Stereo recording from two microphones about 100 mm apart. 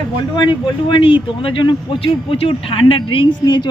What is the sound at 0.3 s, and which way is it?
Speech, 55° left (ahead or behind).